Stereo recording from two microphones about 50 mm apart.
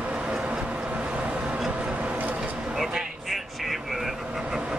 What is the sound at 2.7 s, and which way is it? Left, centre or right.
Vehicle, centre.